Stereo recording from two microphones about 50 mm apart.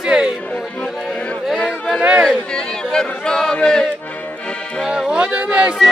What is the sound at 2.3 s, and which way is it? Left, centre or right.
Chatter, centre.